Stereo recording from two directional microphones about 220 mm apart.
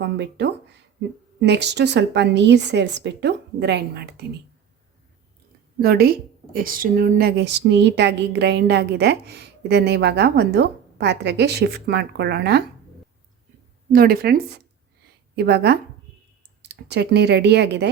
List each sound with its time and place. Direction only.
0.0 s a woman's voice: 50° right (ahead or behind)
5.8 s a woman's voice: 45° right (ahead or behind)
13.9 s a woman's voice: 40° right (ahead or behind)